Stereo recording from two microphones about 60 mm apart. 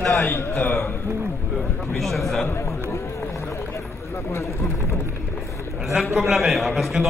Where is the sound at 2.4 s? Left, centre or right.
Left.